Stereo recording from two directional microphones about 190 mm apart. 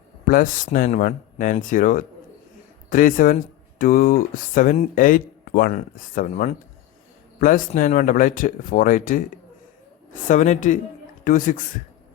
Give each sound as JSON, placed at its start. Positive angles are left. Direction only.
{"t": 0.3, "sound": "speech", "side_deg": 45}
{"t": 10.2, "sound": "speech", "side_deg": 40}